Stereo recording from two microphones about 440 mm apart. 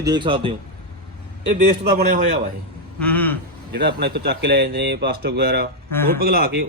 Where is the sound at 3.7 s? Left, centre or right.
Right.